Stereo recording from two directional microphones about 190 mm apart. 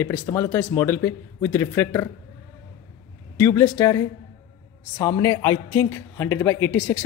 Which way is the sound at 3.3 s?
15° left (ahead or behind).